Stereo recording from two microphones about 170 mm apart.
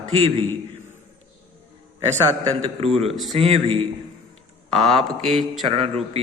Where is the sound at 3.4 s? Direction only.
35° right (ahead or behind).